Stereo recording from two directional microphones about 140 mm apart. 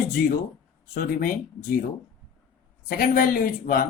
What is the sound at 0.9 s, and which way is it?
Speech, 90° left.